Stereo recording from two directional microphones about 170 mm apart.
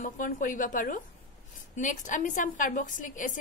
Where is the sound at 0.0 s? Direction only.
50° left (ahead or behind).